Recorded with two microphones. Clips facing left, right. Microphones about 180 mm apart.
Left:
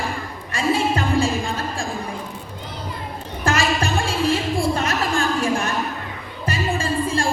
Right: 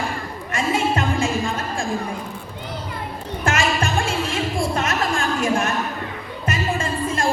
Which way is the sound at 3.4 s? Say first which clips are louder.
Left 1 dB; 35° left (ahead or behind).